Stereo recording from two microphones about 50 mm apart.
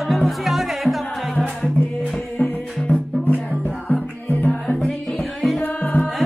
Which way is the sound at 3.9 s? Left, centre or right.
Left.